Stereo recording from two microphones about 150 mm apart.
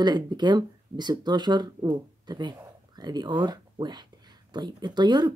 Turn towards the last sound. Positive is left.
turn(degrees=-30)  # may be behind; listen again after turning